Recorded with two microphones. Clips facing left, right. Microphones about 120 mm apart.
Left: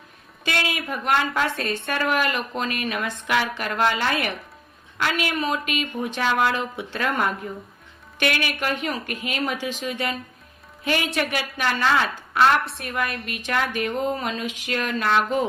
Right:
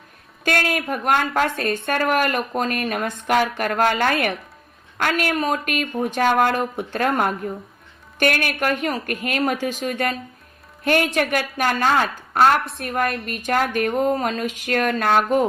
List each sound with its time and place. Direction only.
0.4 s a woman's voice: 50° right (ahead or behind)